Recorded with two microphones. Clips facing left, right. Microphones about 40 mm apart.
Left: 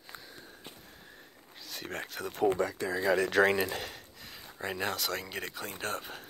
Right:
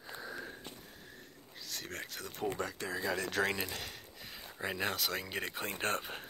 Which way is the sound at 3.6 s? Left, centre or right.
Left.